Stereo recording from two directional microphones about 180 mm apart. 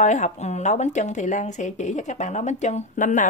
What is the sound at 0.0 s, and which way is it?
Speech, 40° left (ahead or behind).